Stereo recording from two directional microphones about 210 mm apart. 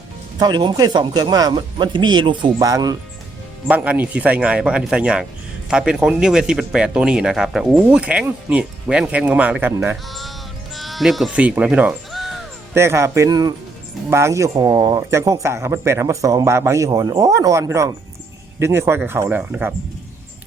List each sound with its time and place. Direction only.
0.3 s speech: 20° right (ahead or behind); by 12.4 s centre (ahead or behind)
12.7 s speech: 10° right (ahead or behind)